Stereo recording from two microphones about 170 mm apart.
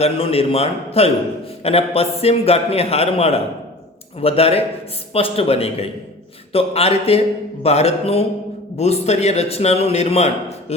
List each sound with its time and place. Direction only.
0.0 s a man's voice: 35° left (ahead or behind)